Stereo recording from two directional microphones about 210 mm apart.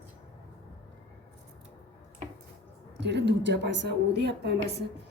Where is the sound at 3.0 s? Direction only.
55° right (ahead or behind).